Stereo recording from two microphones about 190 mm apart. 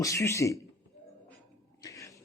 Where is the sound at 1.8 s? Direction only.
15° left (ahead or behind).